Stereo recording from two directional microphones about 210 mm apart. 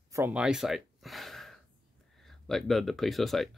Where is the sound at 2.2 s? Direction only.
Centre (ahead or behind).